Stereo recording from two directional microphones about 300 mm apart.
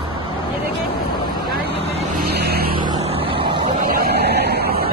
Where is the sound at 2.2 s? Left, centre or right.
Right.